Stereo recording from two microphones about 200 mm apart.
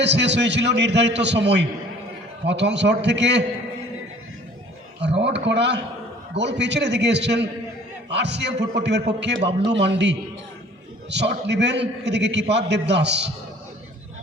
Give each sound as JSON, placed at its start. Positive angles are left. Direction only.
{"t": 0.0, "sound": "a man's voice", "side_deg": -60}
{"t": 4.9, "sound": "a man's voice", "side_deg": -60}